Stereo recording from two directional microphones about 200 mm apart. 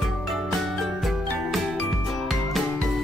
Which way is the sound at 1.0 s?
Centre (ahead or behind).